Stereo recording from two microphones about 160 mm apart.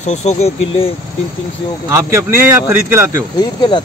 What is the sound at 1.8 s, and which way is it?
A man's voice, 15° right (ahead or behind).